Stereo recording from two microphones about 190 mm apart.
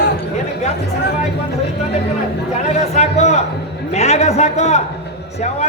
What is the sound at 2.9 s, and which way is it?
Speech, 35° left (ahead or behind).